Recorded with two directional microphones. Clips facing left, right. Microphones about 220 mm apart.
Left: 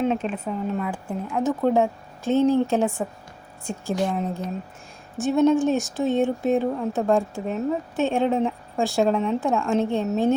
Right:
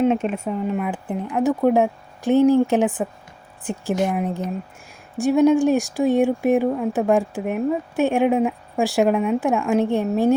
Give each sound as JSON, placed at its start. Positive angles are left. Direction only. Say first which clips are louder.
{"t": 0.3, "sound": "speech", "louder": "right 3 dB", "side_deg": -10}